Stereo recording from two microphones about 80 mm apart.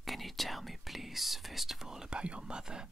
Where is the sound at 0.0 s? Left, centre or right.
Centre.